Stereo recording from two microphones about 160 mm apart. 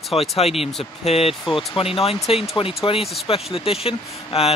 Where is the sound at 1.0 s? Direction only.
40° left (ahead or behind).